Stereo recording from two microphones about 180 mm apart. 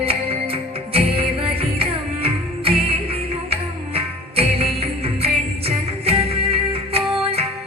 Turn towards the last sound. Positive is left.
turn(degrees=-35)  # may be behind; listen again after turning